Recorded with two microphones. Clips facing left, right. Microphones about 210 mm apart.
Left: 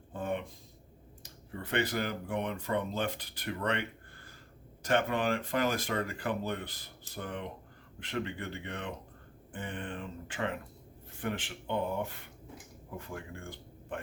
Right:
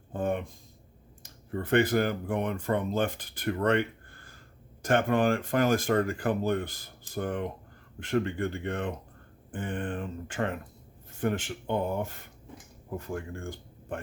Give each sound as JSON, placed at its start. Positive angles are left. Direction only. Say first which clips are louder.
{"t": 0.1, "sound": "speech", "louder": "right 5 dB", "side_deg": -45}